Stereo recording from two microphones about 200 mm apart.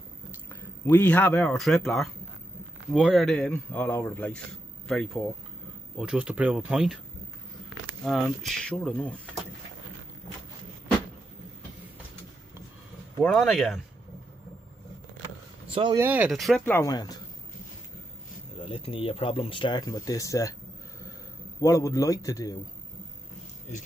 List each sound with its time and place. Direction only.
0.5 s a man's voice: 10° left (ahead or behind)
8.0 s speech: centre (ahead or behind)
13.2 s speech: centre (ahead or behind)
15.7 s speech: 25° right (ahead or behind)
16.0 s speech: 10° right (ahead or behind); by 17.2 s 20° left (ahead or behind)
18.6 s speech: 25° left (ahead or behind)
21.5 s a man's voice: 15° left (ahead or behind)